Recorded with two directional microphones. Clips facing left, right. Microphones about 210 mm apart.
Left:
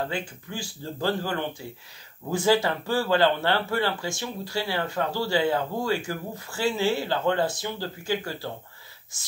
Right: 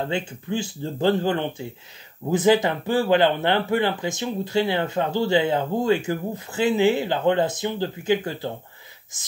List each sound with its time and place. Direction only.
0.1 s speech: 25° right (ahead or behind)